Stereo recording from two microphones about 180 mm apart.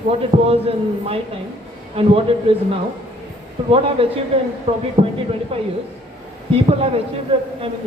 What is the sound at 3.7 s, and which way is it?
Speech, 30° right (ahead or behind).